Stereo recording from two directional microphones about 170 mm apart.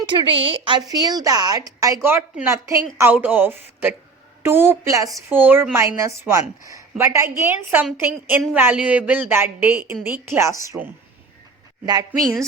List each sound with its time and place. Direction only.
0.1 s a woman's voice: 30° right (ahead or behind); by 10.9 s 10° right (ahead or behind)
11.9 s a woman's voice: 25° right (ahead or behind)